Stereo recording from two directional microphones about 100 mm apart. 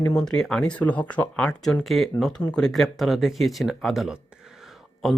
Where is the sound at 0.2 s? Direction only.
5° left (ahead or behind).